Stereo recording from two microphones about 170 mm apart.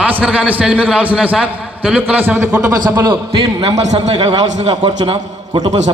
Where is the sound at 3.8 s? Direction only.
40° right (ahead or behind).